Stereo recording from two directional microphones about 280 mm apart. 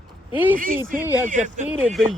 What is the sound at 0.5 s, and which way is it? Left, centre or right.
Speech, right.